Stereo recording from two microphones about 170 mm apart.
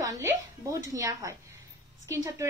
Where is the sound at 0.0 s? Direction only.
15° right (ahead or behind).